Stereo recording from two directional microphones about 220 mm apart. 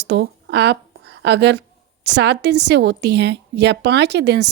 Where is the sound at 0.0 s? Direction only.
50° right (ahead or behind).